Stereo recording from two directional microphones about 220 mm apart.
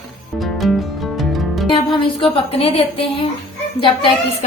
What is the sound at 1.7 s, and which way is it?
Speech, 25° left (ahead or behind).